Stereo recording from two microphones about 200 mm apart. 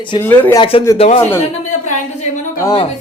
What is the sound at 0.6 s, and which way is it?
Speech, 25° left (ahead or behind).